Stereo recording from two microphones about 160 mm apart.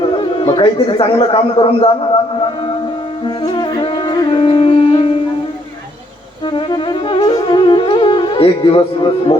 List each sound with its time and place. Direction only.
0.2 s a man's voice: 35° left (ahead or behind)
3.2 s music: 30° left (ahead or behind)
6.5 s music: 30° left (ahead or behind)